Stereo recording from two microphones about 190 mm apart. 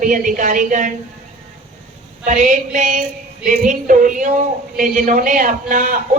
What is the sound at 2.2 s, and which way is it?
A woman's voice, 40° right (ahead or behind).